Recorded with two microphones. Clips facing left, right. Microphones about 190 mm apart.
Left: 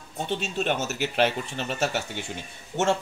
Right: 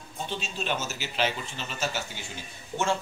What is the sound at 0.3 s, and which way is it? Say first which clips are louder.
Speech: left 6 dB; 65° left (ahead or behind).